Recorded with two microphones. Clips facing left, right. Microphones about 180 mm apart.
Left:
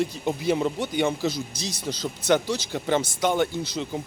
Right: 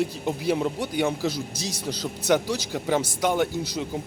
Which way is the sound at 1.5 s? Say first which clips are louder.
Right 1 dB; 35° right (ahead or behind).